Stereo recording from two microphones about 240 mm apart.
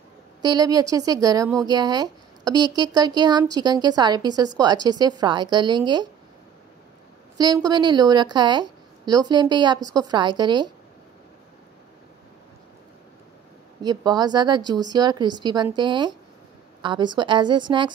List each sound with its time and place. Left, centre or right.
0.4 s a woman's voice: centre
7.3 s a woman's voice: centre
13.8 s a woman's voice: centre